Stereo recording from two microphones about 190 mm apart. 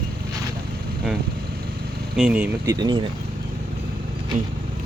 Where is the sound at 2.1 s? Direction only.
5° right (ahead or behind).